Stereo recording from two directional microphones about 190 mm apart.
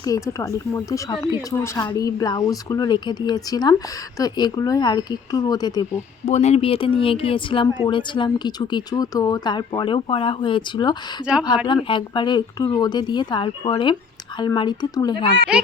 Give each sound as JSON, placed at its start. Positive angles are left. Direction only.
{"t": 0.0, "sound": "speech", "side_deg": 15}
{"t": 6.2, "sound": "speech", "side_deg": 35}
{"t": 15.5, "sound": "a child's voice", "side_deg": -5}